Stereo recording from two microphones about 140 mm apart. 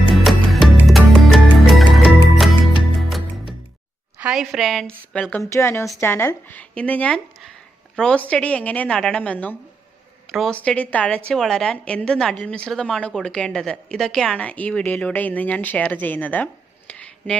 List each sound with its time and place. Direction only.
0.1 s music: centre (ahead or behind)
4.2 s a woman's voice: 5° right (ahead or behind)
5.4 s a woman's voice: 20° left (ahead or behind)